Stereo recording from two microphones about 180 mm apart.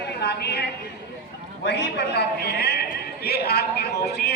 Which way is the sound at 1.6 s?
70° left (ahead or behind).